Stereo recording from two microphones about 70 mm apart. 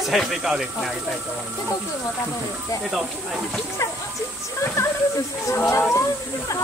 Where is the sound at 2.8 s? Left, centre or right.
Centre.